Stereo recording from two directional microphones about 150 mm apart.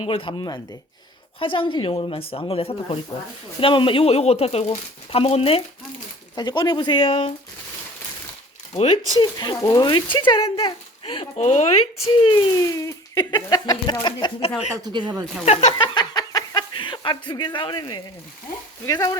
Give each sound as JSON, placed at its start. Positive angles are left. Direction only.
{"t": 0.0, "sound": "speech", "side_deg": 35}
{"t": 6.3, "sound": "speech", "side_deg": 30}
{"t": 9.1, "sound": "speech", "side_deg": 30}
{"t": 12.5, "sound": "speech", "side_deg": 20}
{"t": 14.8, "sound": "speech", "side_deg": -30}
{"t": 15.4, "sound": "a sound", "side_deg": 35}
{"t": 18.9, "sound": "speech", "side_deg": 25}